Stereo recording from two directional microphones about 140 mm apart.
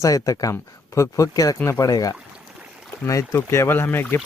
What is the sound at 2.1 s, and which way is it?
Stream, 5° right (ahead or behind).